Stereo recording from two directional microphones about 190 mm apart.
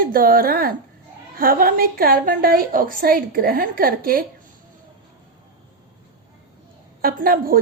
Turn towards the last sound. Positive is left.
turn(degrees=-50)  # may be behind; listen again after turning